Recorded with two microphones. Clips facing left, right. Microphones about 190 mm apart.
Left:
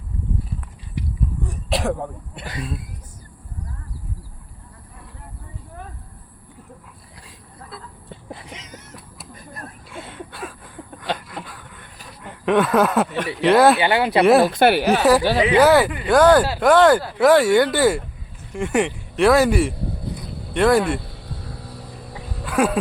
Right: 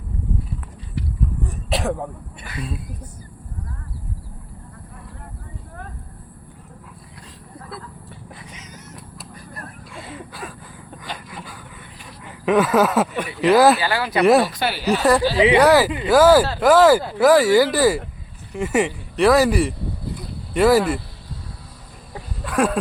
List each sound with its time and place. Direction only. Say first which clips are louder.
1.5 s throat clearing: left 1 dB; centre (ahead or behind)
9.9 s a sound: even; centre (ahead or behind)
12.2 s speech: even; centre (ahead or behind)
13.8 s speech: left 3 dB; 25° left (ahead or behind)
14.4 s speech: left 6 dB; 60° left (ahead or behind)
15.5 s speech: left 2 dB; centre (ahead or behind)
22.4 s a sound: even; centre (ahead or behind)